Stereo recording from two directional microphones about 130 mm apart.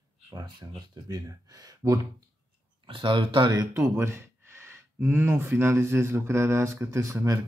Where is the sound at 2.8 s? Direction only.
40° right (ahead or behind).